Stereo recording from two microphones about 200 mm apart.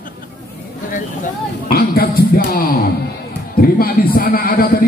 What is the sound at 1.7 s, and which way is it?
A man's voice, 50° left (ahead or behind).